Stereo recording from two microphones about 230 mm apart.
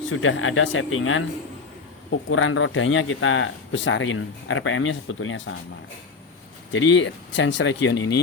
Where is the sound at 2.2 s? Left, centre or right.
Left.